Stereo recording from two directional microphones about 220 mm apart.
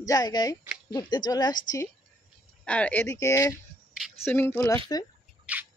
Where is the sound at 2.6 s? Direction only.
5° left (ahead or behind).